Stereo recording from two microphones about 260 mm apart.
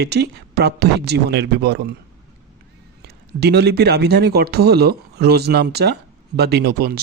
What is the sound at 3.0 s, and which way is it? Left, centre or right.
Speech, right.